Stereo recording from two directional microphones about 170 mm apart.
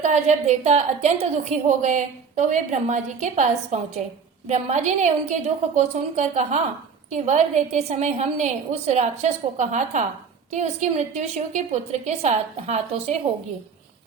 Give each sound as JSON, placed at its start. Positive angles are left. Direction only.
{"t": 0.0, "sound": "a woman's voice", "side_deg": -45}